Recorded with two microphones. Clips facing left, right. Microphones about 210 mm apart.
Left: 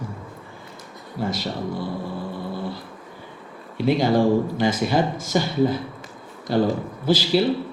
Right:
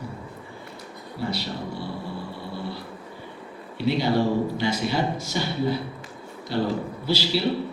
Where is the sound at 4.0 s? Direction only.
50° left (ahead or behind).